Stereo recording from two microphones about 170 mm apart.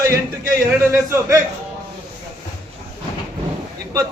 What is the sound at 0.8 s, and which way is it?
Speech, 15° right (ahead or behind).